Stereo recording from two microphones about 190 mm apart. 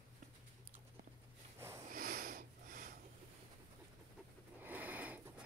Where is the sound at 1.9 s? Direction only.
50° right (ahead or behind).